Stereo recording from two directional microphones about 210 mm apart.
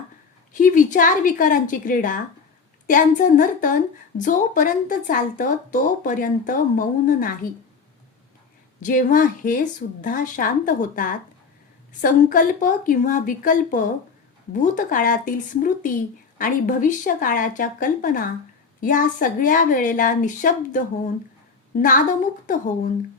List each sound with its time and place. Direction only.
0.5 s speech: 35° left (ahead or behind)
8.8 s speech: 40° left (ahead or behind)